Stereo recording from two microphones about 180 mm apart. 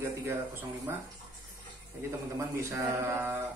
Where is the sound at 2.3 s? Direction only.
15° right (ahead or behind).